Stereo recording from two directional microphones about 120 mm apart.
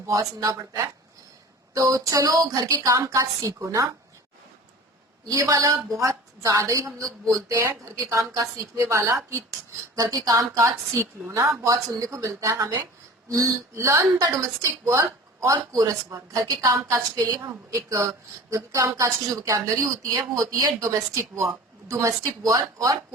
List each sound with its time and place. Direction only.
0.1 s a woman's voice: 30° right (ahead or behind)
5.2 s a woman's voice: 30° right (ahead or behind)